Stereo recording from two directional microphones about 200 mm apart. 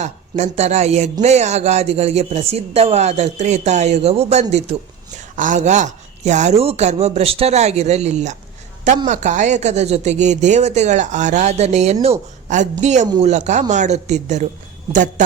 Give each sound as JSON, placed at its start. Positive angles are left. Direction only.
{"t": 0.0, "sound": "speech", "side_deg": -35}